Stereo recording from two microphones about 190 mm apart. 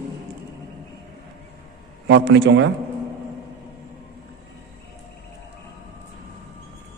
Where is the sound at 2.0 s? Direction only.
65° right (ahead or behind).